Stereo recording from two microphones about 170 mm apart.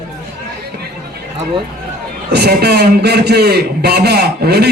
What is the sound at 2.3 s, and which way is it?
A man's voice, 70° right (ahead or behind).